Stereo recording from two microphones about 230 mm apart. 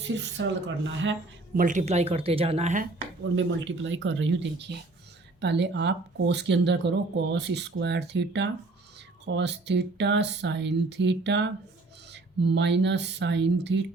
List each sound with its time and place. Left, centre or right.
0.0 s speech: right
1.5 s speech: right
3.3 s speech: right